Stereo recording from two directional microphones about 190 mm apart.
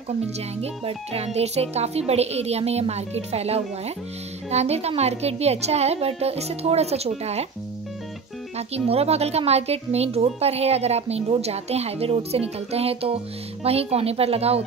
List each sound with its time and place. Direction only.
0.6 s speech: 30° right (ahead or behind)
8.5 s speech: 30° right (ahead or behind)